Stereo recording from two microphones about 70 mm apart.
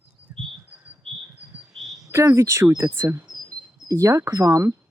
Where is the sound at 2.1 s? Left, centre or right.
Right.